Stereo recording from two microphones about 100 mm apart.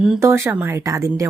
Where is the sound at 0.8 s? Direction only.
35° right (ahead or behind).